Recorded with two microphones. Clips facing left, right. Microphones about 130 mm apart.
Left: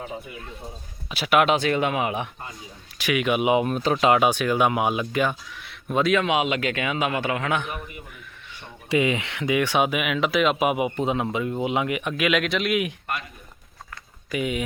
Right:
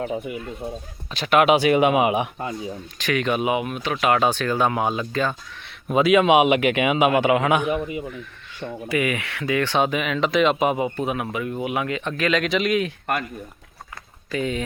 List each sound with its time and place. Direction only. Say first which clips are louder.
0.0 s speech: right 8 dB; 90° right
0.6 s speech: right 11 dB; 60° right (ahead or behind)
1.1 s speech: right 2 dB; 5° left (ahead or behind)
1.5 s a man's voice: right 5 dB; 10° right (ahead or behind)
3.0 s speech: even; 10° left (ahead or behind)
3.4 s speech: left 3 dB; 30° left (ahead or behind)
4.0 s speech: even; 15° left (ahead or behind)
5.6 s speech: right 3 dB; 5° right (ahead or behind)
6.1 s a man's voice: right 7 dB; 20° right (ahead or behind)
8.9 s speech: left 2 dB; 20° left (ahead or behind); by 12.9 s 5° left (ahead or behind)
14.3 s speech: right 1 dB; 10° left (ahead or behind)